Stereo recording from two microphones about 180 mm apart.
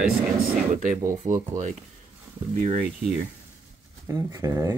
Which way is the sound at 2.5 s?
45° right (ahead or behind).